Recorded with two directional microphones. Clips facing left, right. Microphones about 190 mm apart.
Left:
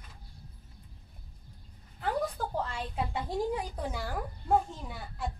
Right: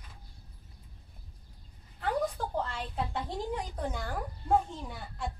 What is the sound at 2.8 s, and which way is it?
A woman's voice, 10° left (ahead or behind).